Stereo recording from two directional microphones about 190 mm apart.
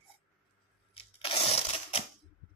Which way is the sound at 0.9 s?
30° left (ahead or behind).